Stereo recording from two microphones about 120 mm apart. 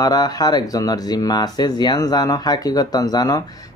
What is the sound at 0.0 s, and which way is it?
Speech, 35° left (ahead or behind).